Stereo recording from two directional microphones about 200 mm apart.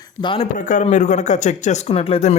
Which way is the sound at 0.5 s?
40° left (ahead or behind).